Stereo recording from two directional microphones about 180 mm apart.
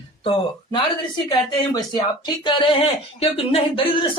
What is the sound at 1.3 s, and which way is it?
Speech, 20° left (ahead or behind).